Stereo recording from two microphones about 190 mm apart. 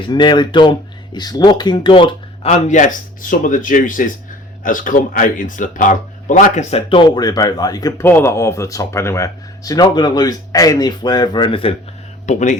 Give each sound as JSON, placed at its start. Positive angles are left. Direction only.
{"t": 0.1, "sound": "speech", "side_deg": 25}
{"t": 7.2, "sound": "speech", "side_deg": 20}
{"t": 12.2, "sound": "speech", "side_deg": 40}